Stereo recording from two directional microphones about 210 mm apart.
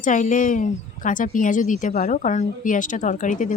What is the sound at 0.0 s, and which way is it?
A woman's voice, 40° left (ahead or behind).